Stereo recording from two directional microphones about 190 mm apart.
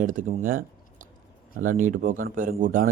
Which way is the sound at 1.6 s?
45° right (ahead or behind).